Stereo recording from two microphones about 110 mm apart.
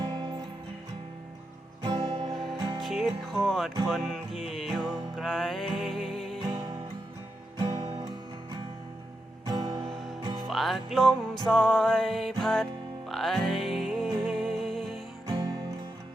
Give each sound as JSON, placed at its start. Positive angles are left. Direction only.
{"t": 0.0, "sound": "music", "side_deg": -45}
{"t": 1.8, "sound": "music", "side_deg": -50}
{"t": 2.3, "sound": "music", "side_deg": 0}
{"t": 2.6, "sound": "music", "side_deg": -45}
{"t": 2.8, "sound": "music", "side_deg": 0}
{"t": 6.4, "sound": "music", "side_deg": -45}
{"t": 7.6, "sound": "music", "side_deg": -60}
{"t": 9.5, "sound": "music", "side_deg": -45}
{"t": 9.9, "sound": "music", "side_deg": 0}
{"t": 15.3, "sound": "music", "side_deg": -50}